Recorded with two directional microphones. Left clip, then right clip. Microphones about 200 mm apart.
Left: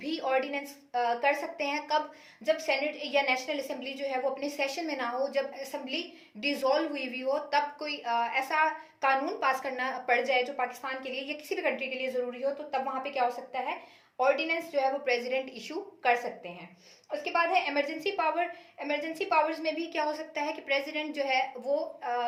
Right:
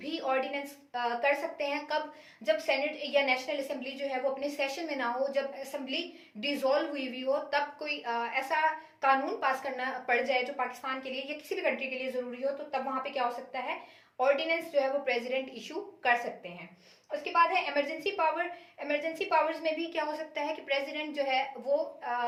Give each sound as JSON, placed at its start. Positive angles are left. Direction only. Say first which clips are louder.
{"t": 0.0, "sound": "a woman's voice", "louder": "left 2 dB", "side_deg": 45}
{"t": 17.1, "sound": "a woman's voice", "louder": "right 1 dB", "side_deg": 45}